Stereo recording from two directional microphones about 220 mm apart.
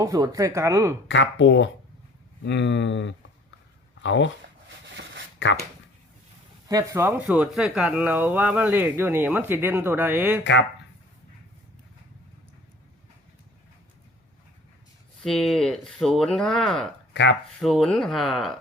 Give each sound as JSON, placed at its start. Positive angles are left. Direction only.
{"t": 0.0, "sound": "speech", "side_deg": -15}
{"t": 1.0, "sound": "speech", "side_deg": 55}
{"t": 5.4, "sound": "speech", "side_deg": 55}
{"t": 6.7, "sound": "speech", "side_deg": -15}
{"t": 10.4, "sound": "speech", "side_deg": 55}
{"t": 15.2, "sound": "speech", "side_deg": 0}